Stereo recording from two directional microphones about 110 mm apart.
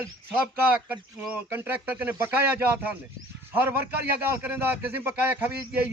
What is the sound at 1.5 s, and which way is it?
Speech, 15° right (ahead or behind).